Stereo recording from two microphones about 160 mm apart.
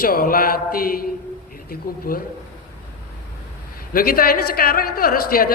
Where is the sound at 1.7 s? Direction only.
65° left (ahead or behind).